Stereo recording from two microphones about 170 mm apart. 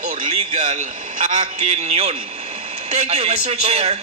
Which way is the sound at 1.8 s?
40° right (ahead or behind).